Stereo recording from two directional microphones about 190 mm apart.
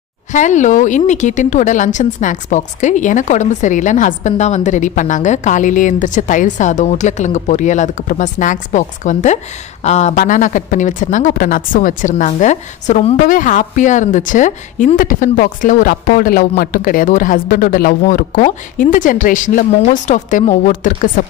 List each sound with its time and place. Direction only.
0.3 s speech: 40° left (ahead or behind)